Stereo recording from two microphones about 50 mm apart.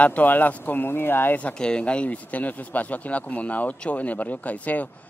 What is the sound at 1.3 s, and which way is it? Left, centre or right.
Speech, left.